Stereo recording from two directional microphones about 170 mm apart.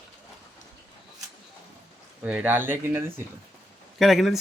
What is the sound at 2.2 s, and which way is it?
Speech, 10° right (ahead or behind).